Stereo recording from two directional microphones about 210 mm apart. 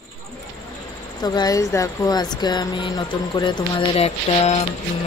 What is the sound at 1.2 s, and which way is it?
Speech, 20° left (ahead or behind).